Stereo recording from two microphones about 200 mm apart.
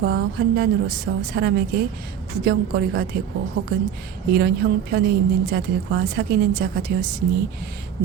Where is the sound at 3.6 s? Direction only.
90° right.